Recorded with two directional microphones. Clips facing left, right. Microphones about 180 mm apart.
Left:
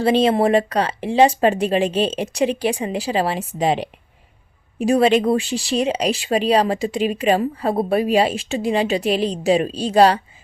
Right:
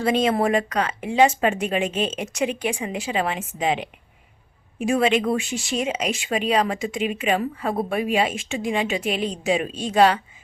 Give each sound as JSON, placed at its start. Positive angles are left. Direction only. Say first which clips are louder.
{"t": 0.0, "sound": "speech", "louder": "left 4 dB", "side_deg": 30}